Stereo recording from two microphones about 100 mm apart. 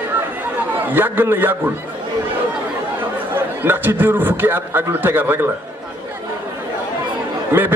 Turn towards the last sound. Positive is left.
turn(degrees=-20)  # may be behind; listen again after turning